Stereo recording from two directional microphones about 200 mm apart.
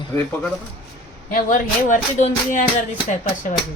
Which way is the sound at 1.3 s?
40° left (ahead or behind).